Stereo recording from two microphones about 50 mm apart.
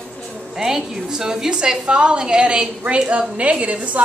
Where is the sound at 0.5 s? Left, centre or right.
Centre.